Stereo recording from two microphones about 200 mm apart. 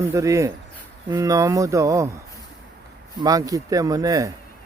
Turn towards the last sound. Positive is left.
turn(degrees=-15)  # may be behind; listen again after turning